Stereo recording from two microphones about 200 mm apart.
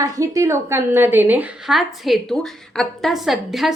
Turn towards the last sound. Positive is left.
turn(degrees=0)  # may be behind; listen again after turning